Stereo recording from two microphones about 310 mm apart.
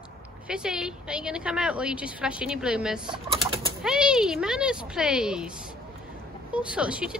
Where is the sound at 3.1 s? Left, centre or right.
Centre.